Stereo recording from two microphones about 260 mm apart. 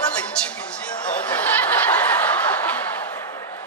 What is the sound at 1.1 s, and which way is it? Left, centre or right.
Snicker, centre.